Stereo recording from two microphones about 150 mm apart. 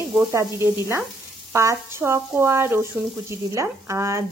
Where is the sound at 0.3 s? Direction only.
20° right (ahead or behind).